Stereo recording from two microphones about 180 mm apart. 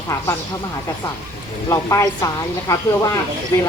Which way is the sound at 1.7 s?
20° left (ahead or behind).